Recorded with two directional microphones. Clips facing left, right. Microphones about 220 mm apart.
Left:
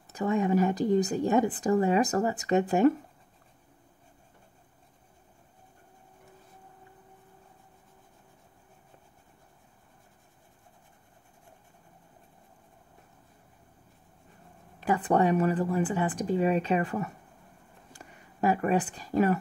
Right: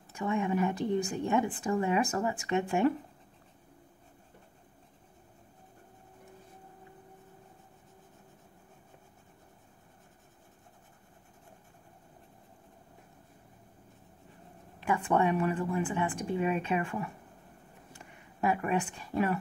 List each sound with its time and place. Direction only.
0.1 s a woman's voice: 40° left (ahead or behind)
14.8 s a woman's voice: 35° left (ahead or behind)